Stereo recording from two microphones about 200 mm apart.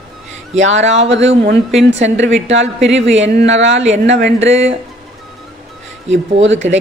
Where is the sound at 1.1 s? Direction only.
65° right (ahead or behind).